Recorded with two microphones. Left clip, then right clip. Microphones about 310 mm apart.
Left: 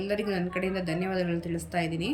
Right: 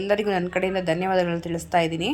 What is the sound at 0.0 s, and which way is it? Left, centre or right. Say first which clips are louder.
A woman's voice: right 7 dB; centre.